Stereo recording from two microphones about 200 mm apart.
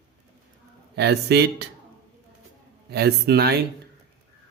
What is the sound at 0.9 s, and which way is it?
Speech, 55° right (ahead or behind).